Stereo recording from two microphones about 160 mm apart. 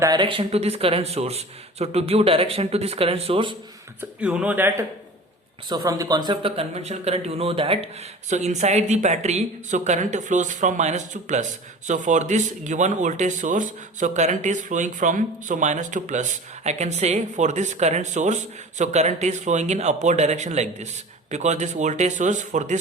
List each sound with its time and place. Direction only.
0.0 s a man's voice: 25° right (ahead or behind)
4.2 s speech: 10° right (ahead or behind)
5.6 s speech: 25° right (ahead or behind); by 22.8 s 50° right (ahead or behind)